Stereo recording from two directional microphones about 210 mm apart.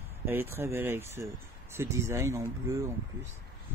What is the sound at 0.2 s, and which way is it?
Speech, 10° right (ahead or behind).